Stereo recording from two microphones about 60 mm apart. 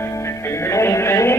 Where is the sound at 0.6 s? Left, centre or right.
Left.